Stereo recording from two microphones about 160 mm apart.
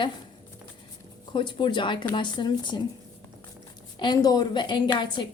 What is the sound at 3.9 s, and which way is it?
A woman's voice, 25° left (ahead or behind).